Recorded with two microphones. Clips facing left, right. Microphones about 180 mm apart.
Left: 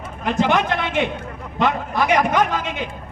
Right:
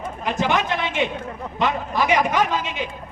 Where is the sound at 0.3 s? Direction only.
55° left (ahead or behind).